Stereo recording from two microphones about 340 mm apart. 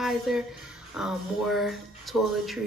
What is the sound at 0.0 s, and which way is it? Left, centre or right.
A woman's voice, centre.